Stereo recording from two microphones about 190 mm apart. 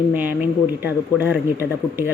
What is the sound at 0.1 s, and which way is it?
Speech, 10° right (ahead or behind).